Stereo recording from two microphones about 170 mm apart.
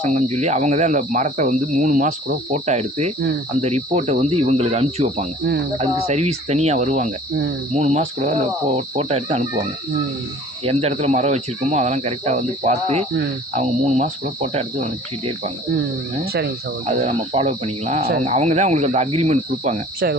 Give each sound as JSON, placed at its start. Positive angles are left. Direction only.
{"t": 0.0, "sound": "speech", "side_deg": -45}
{"t": 10.7, "sound": "speech", "side_deg": -35}
{"t": 16.8, "sound": "speech", "side_deg": -40}